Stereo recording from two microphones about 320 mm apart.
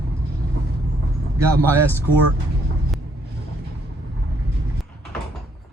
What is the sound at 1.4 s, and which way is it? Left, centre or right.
Speech, centre.